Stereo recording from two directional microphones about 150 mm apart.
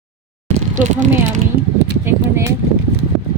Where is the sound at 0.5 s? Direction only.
55° right (ahead or behind).